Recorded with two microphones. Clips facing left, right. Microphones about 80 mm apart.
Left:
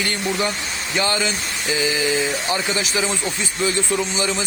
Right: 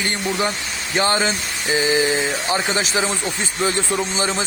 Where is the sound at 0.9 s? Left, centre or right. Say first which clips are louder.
Right 3 dB; right.